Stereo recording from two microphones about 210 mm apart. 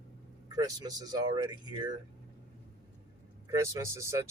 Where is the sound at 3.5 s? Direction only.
15° right (ahead or behind).